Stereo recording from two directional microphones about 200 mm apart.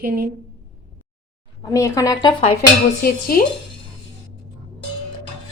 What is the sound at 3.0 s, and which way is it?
Speech, 50° left (ahead or behind).